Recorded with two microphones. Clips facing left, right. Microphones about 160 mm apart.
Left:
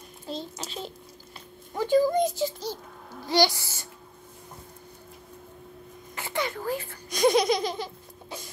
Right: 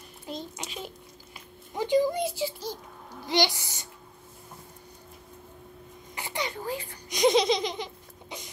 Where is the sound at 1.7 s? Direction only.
15° right (ahead or behind).